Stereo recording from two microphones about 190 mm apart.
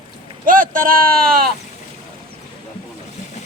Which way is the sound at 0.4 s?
45° right (ahead or behind).